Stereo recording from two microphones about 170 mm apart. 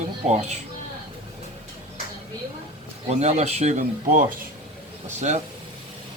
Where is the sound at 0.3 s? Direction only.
40° right (ahead or behind).